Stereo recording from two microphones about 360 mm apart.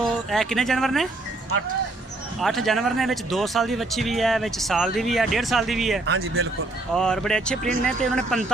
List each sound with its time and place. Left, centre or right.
0.0 s speech: centre
2.4 s speech: centre
6.1 s speech: right
6.9 s speech: centre